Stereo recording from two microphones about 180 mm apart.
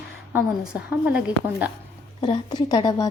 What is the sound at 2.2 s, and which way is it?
Speech, 25° left (ahead or behind).